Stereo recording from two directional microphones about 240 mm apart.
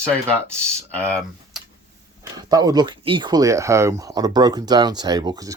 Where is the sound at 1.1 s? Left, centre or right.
Centre.